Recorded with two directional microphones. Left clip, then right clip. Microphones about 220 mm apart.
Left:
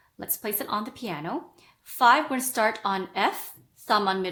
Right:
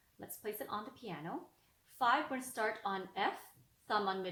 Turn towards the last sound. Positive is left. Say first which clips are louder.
# left 12 dB
turn(degrees=35)  # may be behind; listen again after turning